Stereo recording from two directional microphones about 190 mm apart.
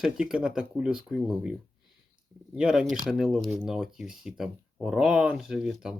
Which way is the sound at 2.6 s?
5° right (ahead or behind).